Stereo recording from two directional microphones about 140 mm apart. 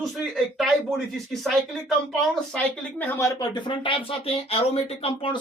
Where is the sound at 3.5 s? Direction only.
35° left (ahead or behind).